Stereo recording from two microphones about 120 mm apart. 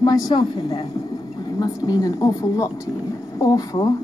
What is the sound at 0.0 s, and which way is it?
Speech, 35° left (ahead or behind).